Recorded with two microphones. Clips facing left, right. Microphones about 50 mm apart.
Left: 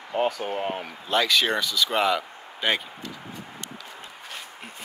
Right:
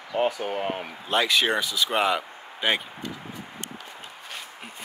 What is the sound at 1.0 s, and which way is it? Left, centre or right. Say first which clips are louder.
Speech: even; right.